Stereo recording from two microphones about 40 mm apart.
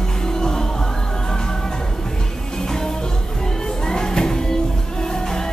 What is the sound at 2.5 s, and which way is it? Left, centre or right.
Music, centre.